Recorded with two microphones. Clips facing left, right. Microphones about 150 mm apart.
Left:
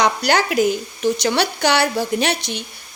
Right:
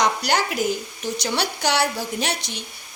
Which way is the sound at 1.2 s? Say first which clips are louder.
Left 2 dB; 70° left (ahead or behind).